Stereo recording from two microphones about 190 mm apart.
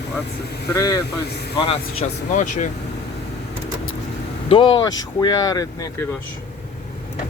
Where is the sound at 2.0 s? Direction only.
40° left (ahead or behind).